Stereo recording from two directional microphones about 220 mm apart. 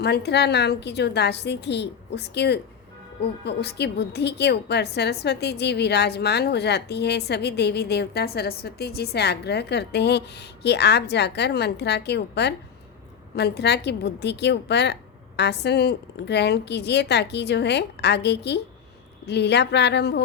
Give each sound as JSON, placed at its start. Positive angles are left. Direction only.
{"t": 0.0, "sound": "a woman's voice", "side_deg": 50}